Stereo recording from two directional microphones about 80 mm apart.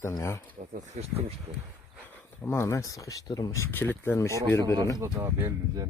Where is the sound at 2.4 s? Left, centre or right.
Left.